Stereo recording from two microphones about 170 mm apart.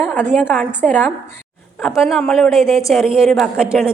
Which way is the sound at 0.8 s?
10° left (ahead or behind).